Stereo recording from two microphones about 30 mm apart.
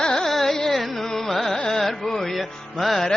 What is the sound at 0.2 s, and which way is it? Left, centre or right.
Carnatic music, centre.